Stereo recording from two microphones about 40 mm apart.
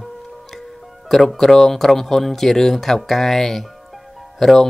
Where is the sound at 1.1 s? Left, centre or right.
Centre.